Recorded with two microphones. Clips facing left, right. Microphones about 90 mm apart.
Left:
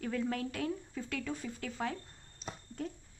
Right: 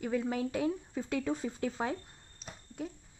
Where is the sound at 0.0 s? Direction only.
15° right (ahead or behind).